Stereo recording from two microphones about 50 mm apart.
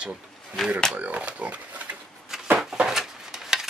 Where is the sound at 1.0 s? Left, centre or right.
Right.